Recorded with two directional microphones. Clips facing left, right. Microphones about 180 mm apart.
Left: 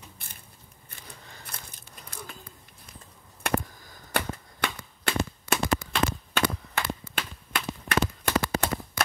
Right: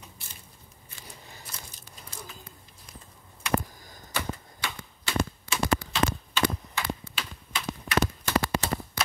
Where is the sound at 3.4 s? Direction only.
60° left (ahead or behind).